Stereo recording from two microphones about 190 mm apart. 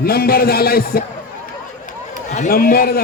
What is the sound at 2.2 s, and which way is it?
Speech, 40° left (ahead or behind).